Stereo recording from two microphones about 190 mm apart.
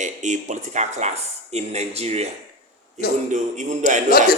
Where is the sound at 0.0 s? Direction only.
40° right (ahead or behind).